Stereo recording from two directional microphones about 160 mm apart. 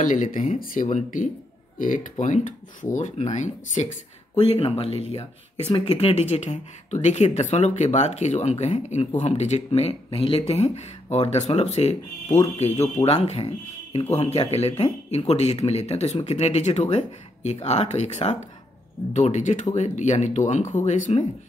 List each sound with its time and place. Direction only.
0.0 s speech: 50° left (ahead or behind)
4.5 s speech: 35° left (ahead or behind)